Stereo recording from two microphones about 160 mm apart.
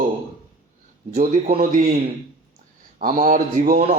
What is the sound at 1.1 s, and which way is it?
Speech, 65° right (ahead or behind).